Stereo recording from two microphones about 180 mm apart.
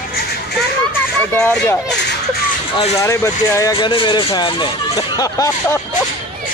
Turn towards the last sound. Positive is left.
turn(degrees=20)  # may be behind; listen again after turning